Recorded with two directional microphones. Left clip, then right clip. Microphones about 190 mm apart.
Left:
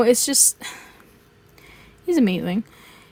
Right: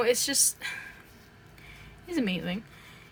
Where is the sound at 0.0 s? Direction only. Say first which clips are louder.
Left 8 dB; 30° left (ahead or behind).